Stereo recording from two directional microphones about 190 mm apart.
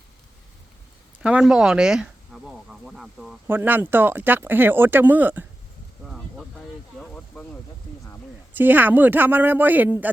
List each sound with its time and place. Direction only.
1.2 s speech: 5° right (ahead or behind)
6.1 s a sound: centre (ahead or behind)
8.5 s speech: 10° right (ahead or behind)